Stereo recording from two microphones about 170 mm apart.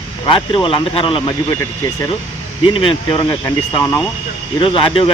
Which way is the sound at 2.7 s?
30° left (ahead or behind).